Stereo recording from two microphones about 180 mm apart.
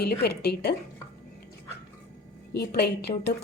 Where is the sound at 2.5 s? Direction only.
65° left (ahead or behind).